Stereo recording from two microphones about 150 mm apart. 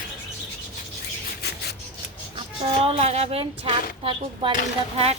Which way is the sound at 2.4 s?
40° right (ahead or behind).